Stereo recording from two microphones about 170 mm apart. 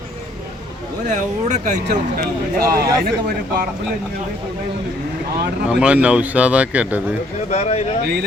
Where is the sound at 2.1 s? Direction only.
65° right (ahead or behind).